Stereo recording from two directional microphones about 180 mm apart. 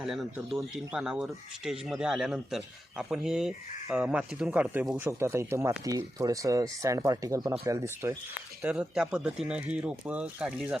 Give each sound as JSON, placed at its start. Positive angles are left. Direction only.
{"t": 0.0, "sound": "speech", "side_deg": 0}